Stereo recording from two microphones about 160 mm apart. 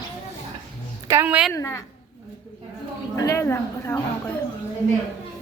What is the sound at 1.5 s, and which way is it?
Speech, 20° left (ahead or behind).